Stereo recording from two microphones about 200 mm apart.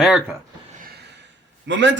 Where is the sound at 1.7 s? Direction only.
65° right (ahead or behind).